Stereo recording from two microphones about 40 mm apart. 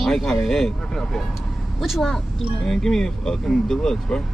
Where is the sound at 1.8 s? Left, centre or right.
Centre.